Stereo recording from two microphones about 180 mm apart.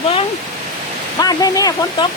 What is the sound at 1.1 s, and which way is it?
Speech, 20° left (ahead or behind).